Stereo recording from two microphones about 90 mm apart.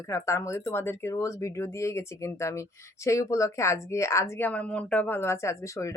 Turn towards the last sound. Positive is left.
turn(degrees=30)  # may be behind; listen again after turning